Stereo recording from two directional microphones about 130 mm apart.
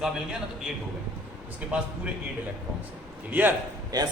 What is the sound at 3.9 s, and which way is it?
Speech, 30° right (ahead or behind).